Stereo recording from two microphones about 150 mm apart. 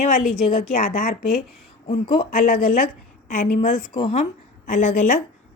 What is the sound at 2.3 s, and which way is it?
A woman's voice, 55° left (ahead or behind).